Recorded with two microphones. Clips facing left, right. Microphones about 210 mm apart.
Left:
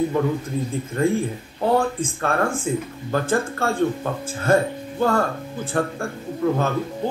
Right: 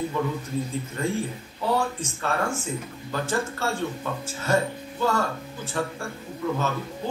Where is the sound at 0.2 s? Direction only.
50° left (ahead or behind).